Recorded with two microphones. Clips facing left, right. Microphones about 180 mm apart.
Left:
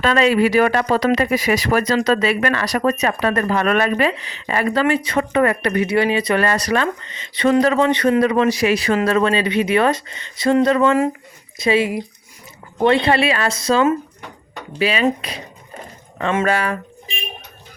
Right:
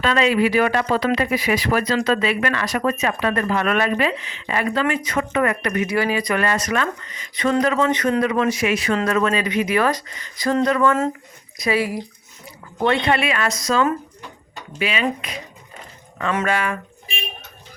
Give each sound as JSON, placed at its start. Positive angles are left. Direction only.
{"t": 0.0, "sound": "speech", "side_deg": 40}
{"t": 6.4, "sound": "speech", "side_deg": 35}